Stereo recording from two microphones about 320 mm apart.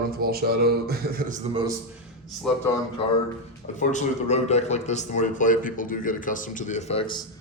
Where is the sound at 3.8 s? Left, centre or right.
Left.